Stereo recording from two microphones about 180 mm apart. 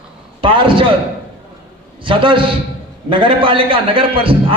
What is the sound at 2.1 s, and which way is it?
A man's voice, 30° right (ahead or behind).